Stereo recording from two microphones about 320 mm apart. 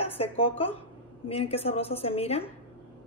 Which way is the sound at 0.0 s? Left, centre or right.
Centre.